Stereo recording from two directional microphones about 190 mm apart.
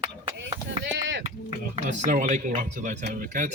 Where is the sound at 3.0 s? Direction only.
60° right (ahead or behind).